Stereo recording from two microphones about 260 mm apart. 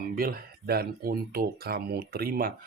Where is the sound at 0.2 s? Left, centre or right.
Right.